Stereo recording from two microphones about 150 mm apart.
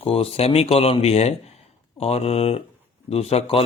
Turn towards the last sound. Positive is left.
turn(degrees=40)  # may be behind; listen again after turning